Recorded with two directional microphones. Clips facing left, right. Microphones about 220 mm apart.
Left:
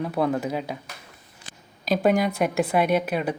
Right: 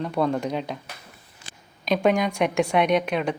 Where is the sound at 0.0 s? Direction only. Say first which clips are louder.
Even; 5° left (ahead or behind).